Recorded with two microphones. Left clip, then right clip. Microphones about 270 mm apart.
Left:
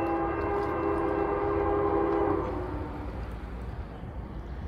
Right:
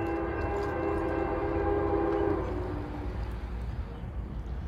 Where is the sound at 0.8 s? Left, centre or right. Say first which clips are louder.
Left 3 dB; centre.